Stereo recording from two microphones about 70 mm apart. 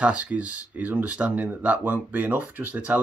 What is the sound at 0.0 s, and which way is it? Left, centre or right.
Speech, centre.